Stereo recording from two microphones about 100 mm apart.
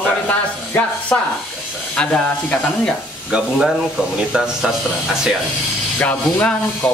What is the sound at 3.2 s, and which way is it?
Speech, 5° right (ahead or behind).